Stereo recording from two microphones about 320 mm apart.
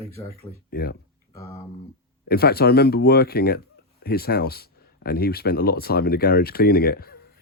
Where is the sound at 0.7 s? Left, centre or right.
Left.